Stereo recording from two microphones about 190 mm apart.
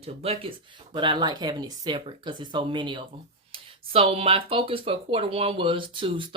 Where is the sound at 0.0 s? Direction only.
30° right (ahead or behind).